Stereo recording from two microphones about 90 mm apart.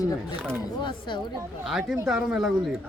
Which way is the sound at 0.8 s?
60° left (ahead or behind).